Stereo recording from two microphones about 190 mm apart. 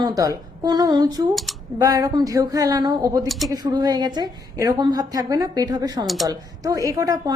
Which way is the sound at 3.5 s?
20° right (ahead or behind).